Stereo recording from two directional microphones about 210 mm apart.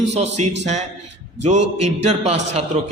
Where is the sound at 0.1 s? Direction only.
30° right (ahead or behind).